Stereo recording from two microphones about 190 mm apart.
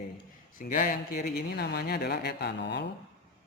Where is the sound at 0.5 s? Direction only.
45° left (ahead or behind); by 2.9 s 65° left (ahead or behind).